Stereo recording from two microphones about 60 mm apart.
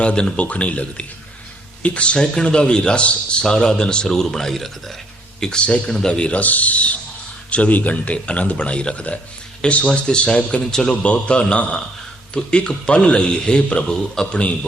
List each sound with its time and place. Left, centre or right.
0.0 s a man's voice: centre